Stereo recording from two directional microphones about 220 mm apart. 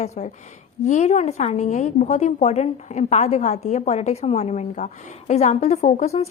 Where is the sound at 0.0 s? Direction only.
30° left (ahead or behind).